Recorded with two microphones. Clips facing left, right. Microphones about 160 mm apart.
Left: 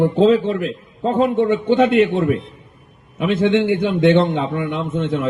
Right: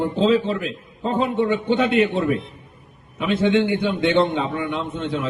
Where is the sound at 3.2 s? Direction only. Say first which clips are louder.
Left 2 dB; 60° left (ahead or behind).